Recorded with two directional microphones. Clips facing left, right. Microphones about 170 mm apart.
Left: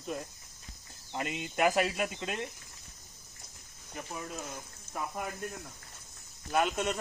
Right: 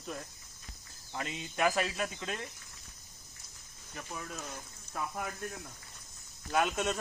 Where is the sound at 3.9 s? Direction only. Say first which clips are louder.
Left 2 dB; 10° left (ahead or behind).